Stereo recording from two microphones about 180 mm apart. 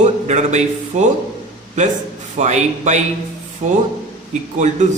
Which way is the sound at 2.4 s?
40° right (ahead or behind).